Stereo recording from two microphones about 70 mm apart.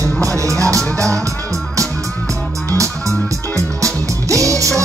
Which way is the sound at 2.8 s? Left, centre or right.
Right.